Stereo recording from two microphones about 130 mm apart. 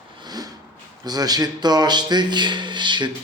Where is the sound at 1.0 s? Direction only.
30° right (ahead or behind).